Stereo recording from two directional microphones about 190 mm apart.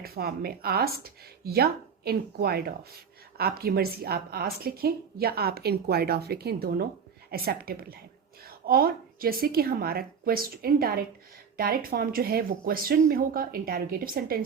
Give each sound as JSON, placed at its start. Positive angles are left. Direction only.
{"t": 0.0, "sound": "a woman's voice", "side_deg": -55}